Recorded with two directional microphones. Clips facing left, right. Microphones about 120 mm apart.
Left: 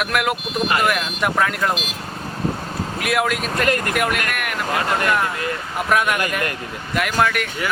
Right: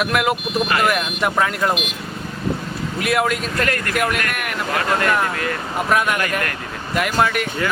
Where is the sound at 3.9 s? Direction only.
Centre (ahead or behind).